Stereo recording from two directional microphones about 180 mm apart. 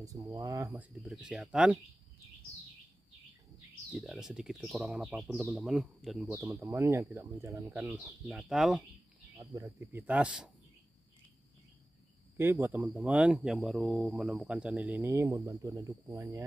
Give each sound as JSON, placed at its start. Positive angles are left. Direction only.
{"t": 0.0, "sound": "speech", "side_deg": -20}
{"t": 1.0, "sound": "speech", "side_deg": 0}
{"t": 3.9, "sound": "speech", "side_deg": 0}
{"t": 6.3, "sound": "speech", "side_deg": -15}
{"t": 9.4, "sound": "speech", "side_deg": -20}
{"t": 12.4, "sound": "speech", "side_deg": -15}